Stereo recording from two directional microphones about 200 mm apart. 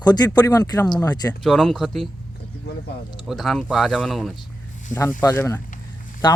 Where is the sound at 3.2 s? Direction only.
Centre (ahead or behind).